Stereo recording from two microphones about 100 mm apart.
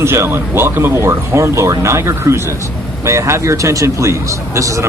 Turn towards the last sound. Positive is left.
turn(degrees=-30)  # may be behind; listen again after turning